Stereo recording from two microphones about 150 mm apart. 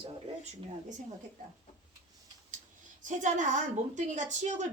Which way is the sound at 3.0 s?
55° right (ahead or behind).